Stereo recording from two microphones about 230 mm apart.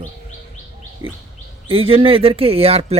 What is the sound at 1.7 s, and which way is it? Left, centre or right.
Speech, right.